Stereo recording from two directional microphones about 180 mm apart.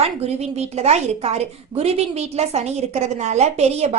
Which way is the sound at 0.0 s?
35° right (ahead or behind).